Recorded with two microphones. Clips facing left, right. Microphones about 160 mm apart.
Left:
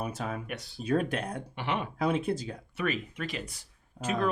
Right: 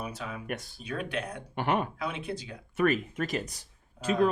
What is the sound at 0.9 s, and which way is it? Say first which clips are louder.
Speech: left 5 dB; 45° left (ahead or behind).